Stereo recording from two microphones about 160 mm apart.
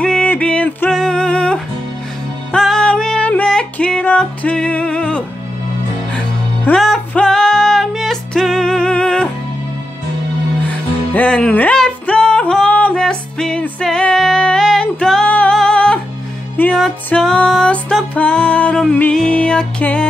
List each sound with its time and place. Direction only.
0.0 s music: 5° left (ahead or behind)
11.1 s music: 5° left (ahead or behind)